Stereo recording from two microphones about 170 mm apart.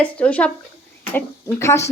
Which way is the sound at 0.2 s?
10° left (ahead or behind).